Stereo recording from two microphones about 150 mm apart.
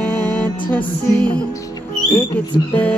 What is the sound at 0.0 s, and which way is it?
Music, 10° left (ahead or behind).